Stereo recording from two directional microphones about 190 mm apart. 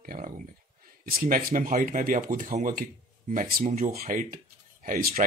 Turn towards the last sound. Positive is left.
turn(degrees=-50)  # may be behind; listen again after turning